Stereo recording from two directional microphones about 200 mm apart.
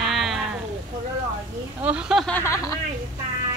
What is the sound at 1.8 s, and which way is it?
Speech, 5° right (ahead or behind).